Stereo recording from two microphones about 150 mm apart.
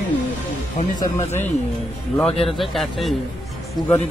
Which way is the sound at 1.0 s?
20° left (ahead or behind).